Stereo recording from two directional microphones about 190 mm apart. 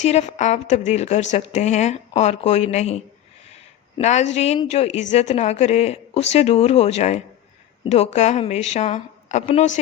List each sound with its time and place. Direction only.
0.0 s a woman's voice: 35° left (ahead or behind)